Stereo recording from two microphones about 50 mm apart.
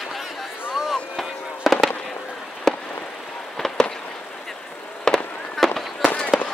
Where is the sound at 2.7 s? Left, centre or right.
Centre.